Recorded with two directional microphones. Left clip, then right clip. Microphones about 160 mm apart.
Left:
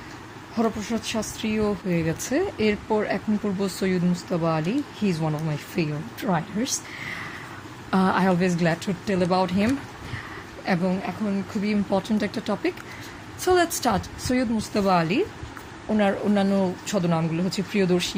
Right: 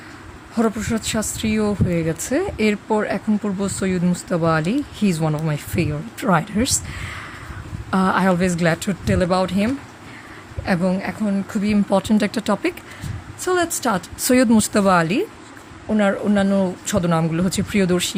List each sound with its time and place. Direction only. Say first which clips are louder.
0.5 s speech: right 4 dB; 50° right (ahead or behind); by 4.0 s 30° right (ahead or behind)
4.1 s speech: right 6 dB; 45° right (ahead or behind)
7.9 s speech: right 4 dB; 20° right (ahead or behind); by 9.6 s 40° right (ahead or behind)
10.7 s speech: right 4 dB; 35° right (ahead or behind)
11.5 s speech: right 6 dB; 50° right (ahead or behind)
13.4 s a woman's voice: right 1 dB; 20° right (ahead or behind)
14.3 s speech: right 10 dB; 55° right (ahead or behind)